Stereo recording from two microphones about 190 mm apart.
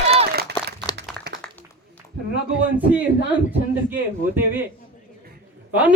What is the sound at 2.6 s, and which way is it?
Speech, 10° right (ahead or behind).